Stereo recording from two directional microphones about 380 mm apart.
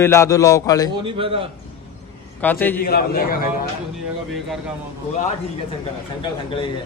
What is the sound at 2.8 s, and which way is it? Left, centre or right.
Speech, left.